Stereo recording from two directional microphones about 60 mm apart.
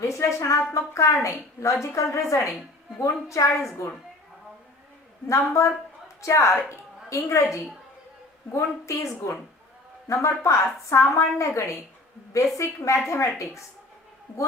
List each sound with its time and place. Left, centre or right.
0.0 s a woman's voice: left
5.3 s a woman's voice: left